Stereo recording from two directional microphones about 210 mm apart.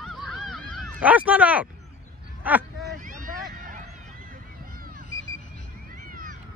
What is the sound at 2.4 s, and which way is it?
Speech, 5° right (ahead or behind).